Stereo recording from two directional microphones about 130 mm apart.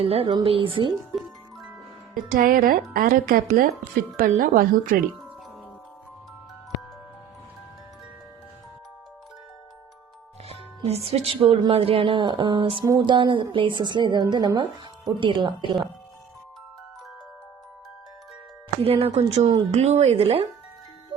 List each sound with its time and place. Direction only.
0.0 s a woman's voice: 50° right (ahead or behind)
1.1 s music: centre (ahead or behind)
2.3 s speech: 90° right
10.5 s a woman's voice: 55° right (ahead or behind)
12.8 s a woman's voice: 30° right (ahead or behind)
18.8 s speech: 50° right (ahead or behind)